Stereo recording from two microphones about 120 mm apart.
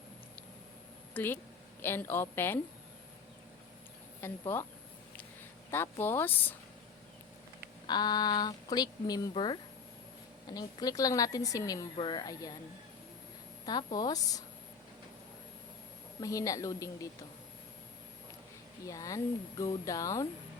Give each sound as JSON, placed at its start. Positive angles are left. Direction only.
{"t": 1.1, "sound": "speech", "side_deg": 15}
{"t": 4.2, "sound": "speech", "side_deg": 20}
{"t": 5.7, "sound": "speech", "side_deg": 20}
{"t": 7.9, "sound": "speech", "side_deg": 35}
{"t": 11.9, "sound": "a woman's voice", "side_deg": 45}
{"t": 13.7, "sound": "speech", "side_deg": 35}
{"t": 16.2, "sound": "speech", "side_deg": 30}
{"t": 18.9, "sound": "speech", "side_deg": 30}